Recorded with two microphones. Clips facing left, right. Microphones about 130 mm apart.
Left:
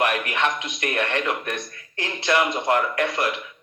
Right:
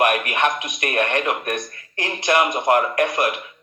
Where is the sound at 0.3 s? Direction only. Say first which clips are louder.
Right 3 dB; 15° right (ahead or behind).